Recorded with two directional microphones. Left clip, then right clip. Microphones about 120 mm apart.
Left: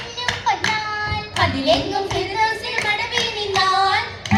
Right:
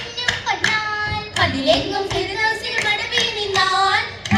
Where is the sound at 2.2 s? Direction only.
45° right (ahead or behind).